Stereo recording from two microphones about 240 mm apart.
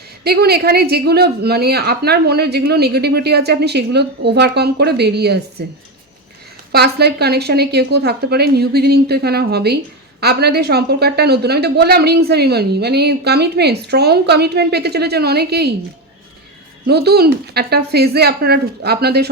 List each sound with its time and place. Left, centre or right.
0.3 s a woman's voice: right
6.7 s a woman's voice: right
16.8 s a woman's voice: right